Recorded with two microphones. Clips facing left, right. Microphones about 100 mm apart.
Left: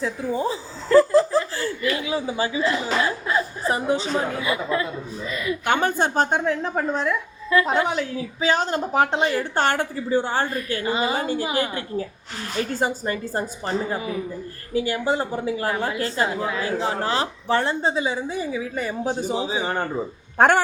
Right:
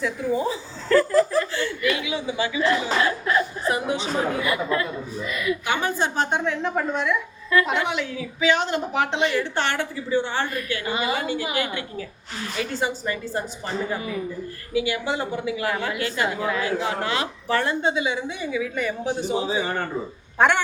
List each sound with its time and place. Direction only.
0.0 s a woman's voice: 30° left (ahead or behind)
0.9 s laughter: 30° left (ahead or behind)
2.8 s speech: 30° left (ahead or behind)
5.6 s a woman's voice: 50° left (ahead or behind)
19.5 s a man's voice: 20° left (ahead or behind)